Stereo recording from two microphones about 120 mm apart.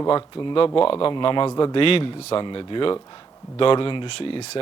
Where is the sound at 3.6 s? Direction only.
50° left (ahead or behind).